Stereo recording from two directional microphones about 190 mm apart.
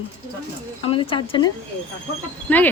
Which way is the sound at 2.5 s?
10° left (ahead or behind).